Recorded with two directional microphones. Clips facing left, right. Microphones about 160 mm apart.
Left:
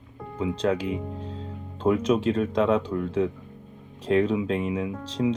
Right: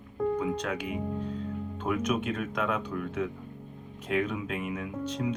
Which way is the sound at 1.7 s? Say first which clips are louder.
Left 8 dB; 30° left (ahead or behind).